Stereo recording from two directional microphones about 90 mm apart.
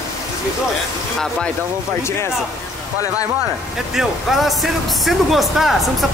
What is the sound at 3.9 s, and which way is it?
Speech, centre (ahead or behind).